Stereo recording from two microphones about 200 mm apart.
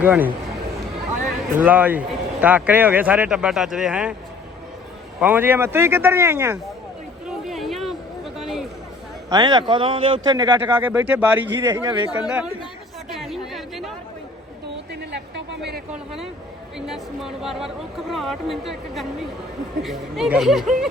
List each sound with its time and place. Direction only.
0.0 s speech: 10° right (ahead or behind)
1.5 s speech: 10° right (ahead or behind)
5.2 s speech: 10° right (ahead or behind)
7.3 s a sound: centre (ahead or behind)
9.3 s a man's voice: 20° right (ahead or behind)
10.8 s speech: 10° right (ahead or behind)
13.1 s chatter: centre (ahead or behind)
15.1 s a sound: 60° right (ahead or behind)
16.7 s speech: centre (ahead or behind)